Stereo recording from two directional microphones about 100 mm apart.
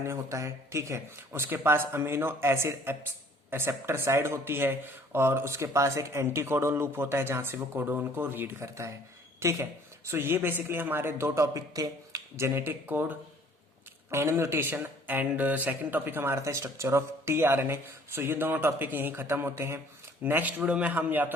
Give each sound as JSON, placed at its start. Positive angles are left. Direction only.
{"t": 0.0, "sound": "a man's voice", "side_deg": -30}